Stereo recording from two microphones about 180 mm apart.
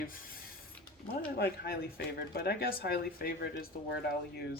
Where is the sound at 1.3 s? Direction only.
65° left (ahead or behind).